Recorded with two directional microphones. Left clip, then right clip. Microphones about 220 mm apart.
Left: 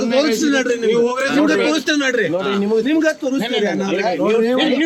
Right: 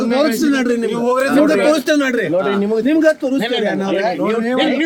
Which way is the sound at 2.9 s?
50° right (ahead or behind).